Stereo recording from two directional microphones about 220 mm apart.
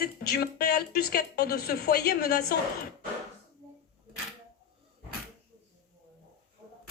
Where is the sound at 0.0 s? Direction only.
45° left (ahead or behind).